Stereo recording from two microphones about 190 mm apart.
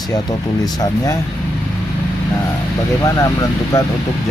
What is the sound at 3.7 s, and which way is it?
Speech, 15° left (ahead or behind).